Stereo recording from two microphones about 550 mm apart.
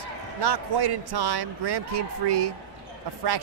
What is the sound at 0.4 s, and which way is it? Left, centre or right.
Speech, right.